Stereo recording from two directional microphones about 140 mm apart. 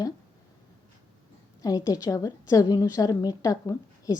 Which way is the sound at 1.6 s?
25° left (ahead or behind).